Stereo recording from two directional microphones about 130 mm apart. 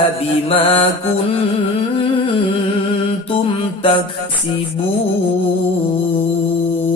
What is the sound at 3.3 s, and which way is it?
Mantra, 45° left (ahead or behind).